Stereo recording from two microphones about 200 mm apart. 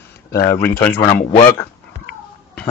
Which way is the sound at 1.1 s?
30° left (ahead or behind).